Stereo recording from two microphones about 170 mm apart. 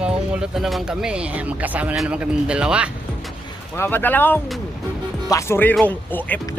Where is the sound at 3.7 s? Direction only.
15° left (ahead or behind).